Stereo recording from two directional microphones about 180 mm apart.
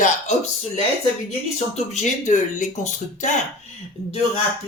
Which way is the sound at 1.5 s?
40° left (ahead or behind).